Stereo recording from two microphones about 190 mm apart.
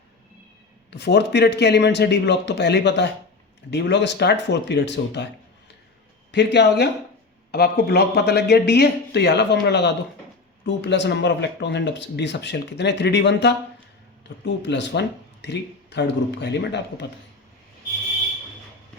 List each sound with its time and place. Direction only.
0.9 s speech: 65° left (ahead or behind)
6.3 s speech: 65° left (ahead or behind)